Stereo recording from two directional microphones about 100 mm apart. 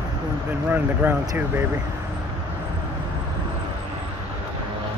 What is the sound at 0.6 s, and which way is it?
Speech, 20° right (ahead or behind).